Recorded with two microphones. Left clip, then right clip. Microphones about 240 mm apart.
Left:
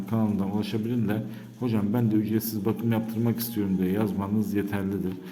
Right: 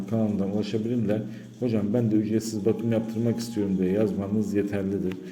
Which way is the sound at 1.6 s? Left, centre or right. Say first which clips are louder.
Right 2 dB; centre.